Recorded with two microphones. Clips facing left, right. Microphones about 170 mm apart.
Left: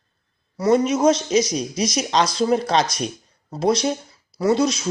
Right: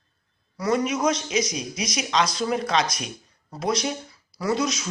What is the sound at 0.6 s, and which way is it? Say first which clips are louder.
Speech: left 6 dB; 30° left (ahead or behind).